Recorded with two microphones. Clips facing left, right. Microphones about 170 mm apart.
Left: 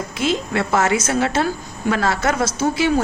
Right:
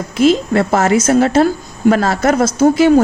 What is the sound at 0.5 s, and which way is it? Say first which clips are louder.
A woman's voice: right 6 dB; 40° right (ahead or behind).